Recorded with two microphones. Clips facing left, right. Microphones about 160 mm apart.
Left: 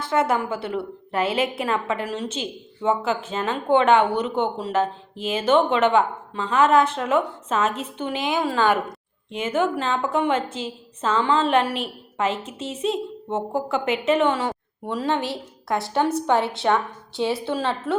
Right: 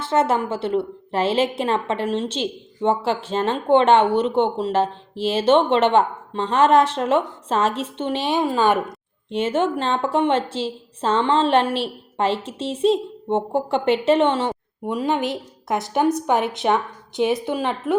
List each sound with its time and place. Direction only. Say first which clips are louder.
0.0 s a woman's voice: right 2 dB; 25° right (ahead or behind)
8.4 s a woman's voice: right 1 dB; 20° right (ahead or behind)
9.3 s a woman's voice: right 2 dB; 30° right (ahead or behind)